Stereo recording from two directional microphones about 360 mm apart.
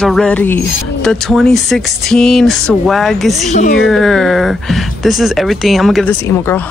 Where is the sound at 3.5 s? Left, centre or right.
Centre.